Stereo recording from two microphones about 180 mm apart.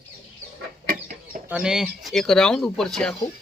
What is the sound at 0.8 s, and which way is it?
Chicken, 55° right (ahead or behind).